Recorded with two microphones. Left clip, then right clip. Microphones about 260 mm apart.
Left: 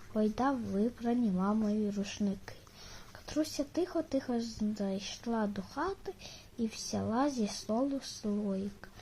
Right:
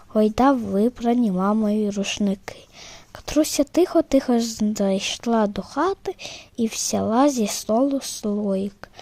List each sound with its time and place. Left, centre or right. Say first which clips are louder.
0.1 s speech: right 14 dB; right